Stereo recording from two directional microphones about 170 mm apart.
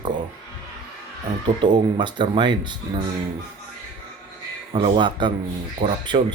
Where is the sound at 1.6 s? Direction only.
25° right (ahead or behind).